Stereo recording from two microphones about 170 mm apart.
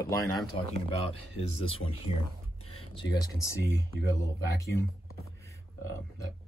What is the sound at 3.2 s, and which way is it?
Speech, 15° left (ahead or behind).